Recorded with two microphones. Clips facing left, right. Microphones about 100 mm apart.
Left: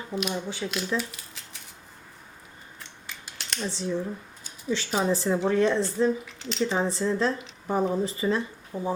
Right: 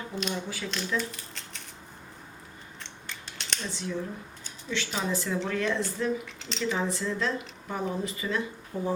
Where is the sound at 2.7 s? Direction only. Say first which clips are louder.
Even; 5° left (ahead or behind).